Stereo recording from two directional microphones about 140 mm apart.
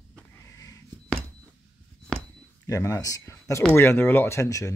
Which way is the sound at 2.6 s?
20° left (ahead or behind).